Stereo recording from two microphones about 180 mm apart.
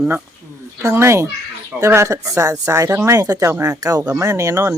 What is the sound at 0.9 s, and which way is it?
Speech, 15° right (ahead or behind).